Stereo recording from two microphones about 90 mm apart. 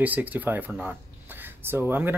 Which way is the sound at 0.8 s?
20° right (ahead or behind).